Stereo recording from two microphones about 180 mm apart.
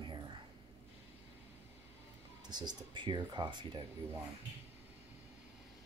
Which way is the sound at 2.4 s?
25° right (ahead or behind).